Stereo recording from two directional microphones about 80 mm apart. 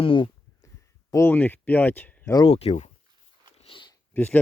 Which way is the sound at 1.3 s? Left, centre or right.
Left.